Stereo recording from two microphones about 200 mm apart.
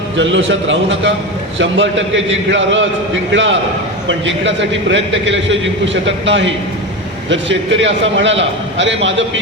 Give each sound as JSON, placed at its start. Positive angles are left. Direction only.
{"t": 0.2, "sound": "a man's voice", "side_deg": -70}